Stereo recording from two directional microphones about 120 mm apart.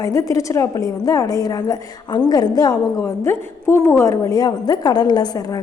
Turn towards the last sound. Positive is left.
turn(degrees=30)  # may be behind; listen again after turning